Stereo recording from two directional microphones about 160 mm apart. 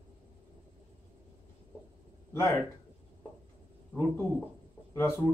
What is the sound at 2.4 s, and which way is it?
Speech, 15° left (ahead or behind).